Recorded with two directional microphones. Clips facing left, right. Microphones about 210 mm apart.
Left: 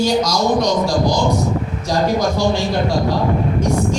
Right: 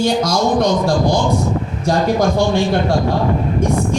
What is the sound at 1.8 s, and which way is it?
Speech, 55° right (ahead or behind).